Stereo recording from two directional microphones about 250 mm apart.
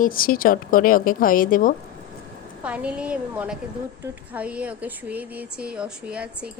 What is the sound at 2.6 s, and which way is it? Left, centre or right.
Speech, centre.